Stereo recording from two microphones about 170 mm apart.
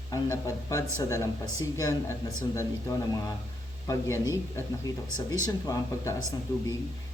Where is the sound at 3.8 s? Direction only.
20° left (ahead or behind).